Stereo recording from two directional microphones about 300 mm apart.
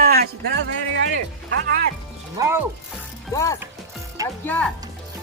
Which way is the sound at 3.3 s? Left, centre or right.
Centre.